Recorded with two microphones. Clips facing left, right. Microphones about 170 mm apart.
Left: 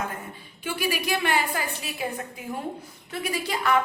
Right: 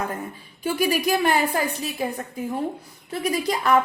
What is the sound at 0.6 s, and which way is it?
A woman's voice, 40° right (ahead or behind).